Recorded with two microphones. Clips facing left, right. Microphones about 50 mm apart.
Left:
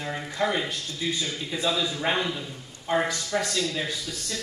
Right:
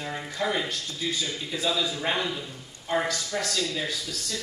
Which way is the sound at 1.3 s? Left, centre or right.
Left.